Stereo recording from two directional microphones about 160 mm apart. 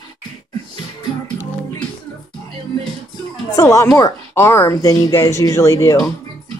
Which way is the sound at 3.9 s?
20° left (ahead or behind).